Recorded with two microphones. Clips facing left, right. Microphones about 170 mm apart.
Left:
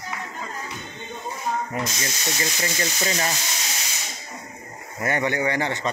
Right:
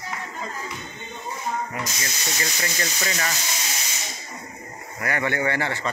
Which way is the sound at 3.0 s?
20° left (ahead or behind).